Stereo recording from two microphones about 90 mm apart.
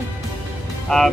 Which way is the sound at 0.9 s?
5° left (ahead or behind).